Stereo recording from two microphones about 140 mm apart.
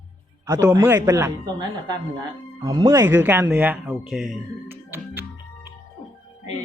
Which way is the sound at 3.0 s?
15° right (ahead or behind).